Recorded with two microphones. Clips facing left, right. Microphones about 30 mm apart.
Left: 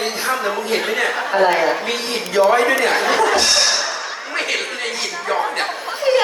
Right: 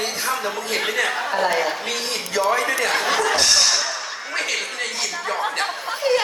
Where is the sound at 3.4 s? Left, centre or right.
Left.